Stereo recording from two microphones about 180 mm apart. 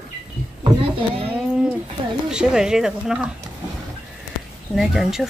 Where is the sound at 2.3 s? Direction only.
5° right (ahead or behind).